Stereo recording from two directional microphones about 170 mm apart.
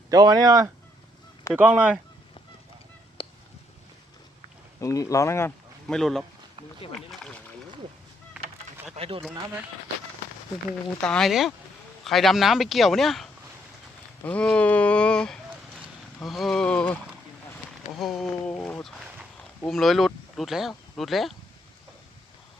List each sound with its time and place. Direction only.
0.1 s speech: 25° right (ahead or behind)
1.5 s speech: 10° right (ahead or behind)
3.2 s honk: 30° left (ahead or behind)
4.8 s speech: 20° left (ahead or behind)
5.9 s speech: centre (ahead or behind)
7.1 s a sound: 5° left (ahead or behind)
9.0 s speech: 35° right (ahead or behind)
11.0 s speech: 5° left (ahead or behind)
14.3 s speech: 5° left (ahead or behind)